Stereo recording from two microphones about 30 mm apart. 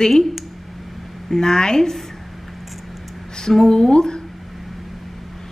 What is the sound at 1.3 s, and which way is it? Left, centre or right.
Speech, left.